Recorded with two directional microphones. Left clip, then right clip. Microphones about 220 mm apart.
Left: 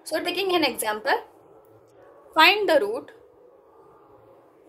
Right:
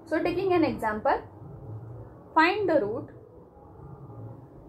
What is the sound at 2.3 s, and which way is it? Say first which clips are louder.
Speech: left 5 dB; 50° left (ahead or behind).